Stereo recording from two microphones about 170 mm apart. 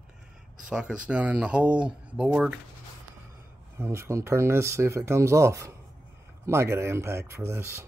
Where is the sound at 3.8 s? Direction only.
15° right (ahead or behind).